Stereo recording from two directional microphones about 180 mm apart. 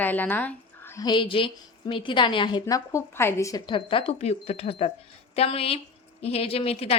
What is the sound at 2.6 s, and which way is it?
A woman's voice, 15° left (ahead or behind).